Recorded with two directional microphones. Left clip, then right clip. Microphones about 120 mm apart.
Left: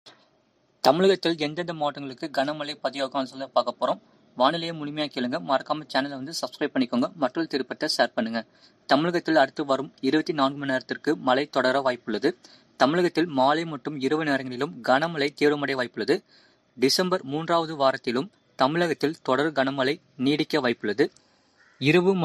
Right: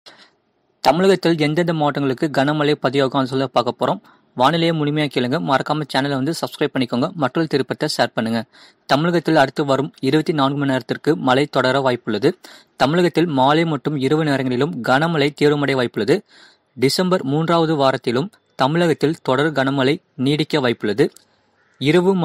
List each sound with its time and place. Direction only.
1.0 s speech: 55° right (ahead or behind)
4.7 s speech: 45° right (ahead or behind)
10.8 s a man's voice: 45° right (ahead or behind)